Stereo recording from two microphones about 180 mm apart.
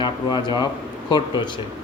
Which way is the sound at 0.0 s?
25° left (ahead or behind).